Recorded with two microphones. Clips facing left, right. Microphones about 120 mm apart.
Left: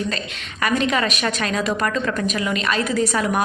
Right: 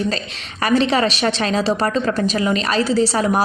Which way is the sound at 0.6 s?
35° right (ahead or behind).